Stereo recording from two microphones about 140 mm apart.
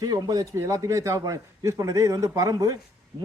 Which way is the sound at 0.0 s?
25° right (ahead or behind).